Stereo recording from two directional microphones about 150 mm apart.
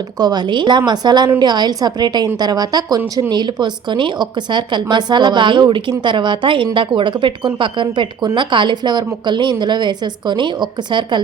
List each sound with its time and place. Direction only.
0.2 s a woman's voice: 25° right (ahead or behind)